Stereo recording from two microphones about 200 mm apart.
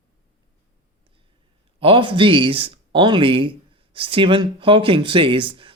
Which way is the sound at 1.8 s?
25° right (ahead or behind).